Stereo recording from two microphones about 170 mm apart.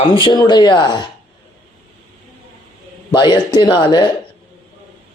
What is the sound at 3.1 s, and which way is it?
Speech, 25° left (ahead or behind).